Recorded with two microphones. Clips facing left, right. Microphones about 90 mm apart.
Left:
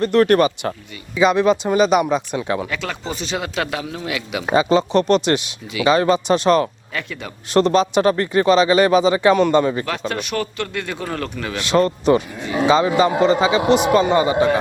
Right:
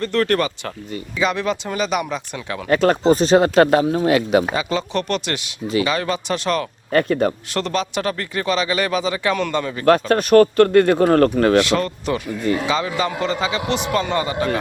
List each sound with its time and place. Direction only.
0.0 s speech: 20° left (ahead or behind)
2.6 s speech: 45° right (ahead or behind)
4.5 s speech: 25° left (ahead or behind)
6.9 s speech: 45° right (ahead or behind)
7.5 s speech: 25° left (ahead or behind)
9.8 s speech: 45° right (ahead or behind)
11.6 s speech: 25° left (ahead or behind)